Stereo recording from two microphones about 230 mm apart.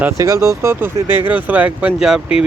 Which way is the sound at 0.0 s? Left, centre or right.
Centre.